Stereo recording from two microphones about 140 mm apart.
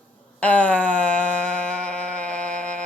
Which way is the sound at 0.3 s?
10° left (ahead or behind).